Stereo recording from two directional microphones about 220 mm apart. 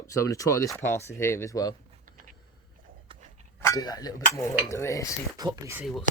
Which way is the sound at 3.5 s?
15° left (ahead or behind).